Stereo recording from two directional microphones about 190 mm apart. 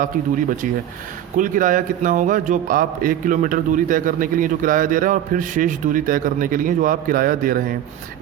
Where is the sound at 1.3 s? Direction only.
45° right (ahead or behind).